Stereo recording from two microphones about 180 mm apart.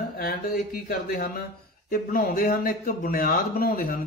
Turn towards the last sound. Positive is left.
turn(degrees=55)  # may be behind; listen again after turning